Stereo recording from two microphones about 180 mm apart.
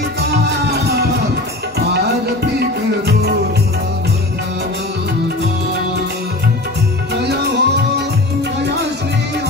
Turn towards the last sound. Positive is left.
turn(degrees=-70)  # may be behind; listen again after turning